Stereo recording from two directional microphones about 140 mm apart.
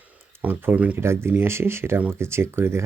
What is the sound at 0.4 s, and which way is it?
Speech, 15° right (ahead or behind).